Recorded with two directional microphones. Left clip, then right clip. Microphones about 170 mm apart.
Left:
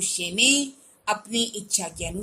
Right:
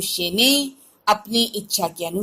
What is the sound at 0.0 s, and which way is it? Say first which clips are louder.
A woman's voice: right 3 dB; 20° right (ahead or behind).